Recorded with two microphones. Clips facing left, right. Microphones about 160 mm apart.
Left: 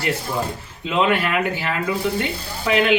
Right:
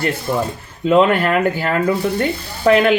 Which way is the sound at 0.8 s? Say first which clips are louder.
Right 7 dB; 45° right (ahead or behind).